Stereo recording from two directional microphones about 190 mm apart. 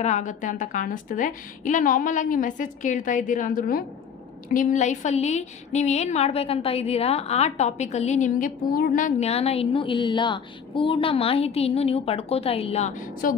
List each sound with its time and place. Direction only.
0.0 s a woman's voice: 40° left (ahead or behind)